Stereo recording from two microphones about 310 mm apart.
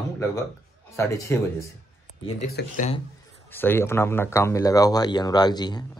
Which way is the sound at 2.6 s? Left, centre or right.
Left.